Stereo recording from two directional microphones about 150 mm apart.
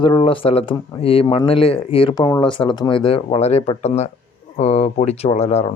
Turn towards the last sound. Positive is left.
turn(degrees=45)  # may be behind; listen again after turning